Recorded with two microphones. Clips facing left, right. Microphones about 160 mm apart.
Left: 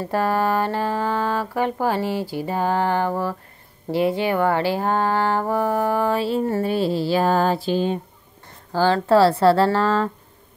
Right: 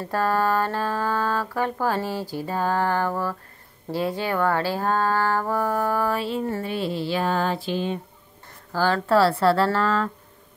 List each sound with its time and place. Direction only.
0.0 s speech: 15° left (ahead or behind); by 10.1 s 30° left (ahead or behind)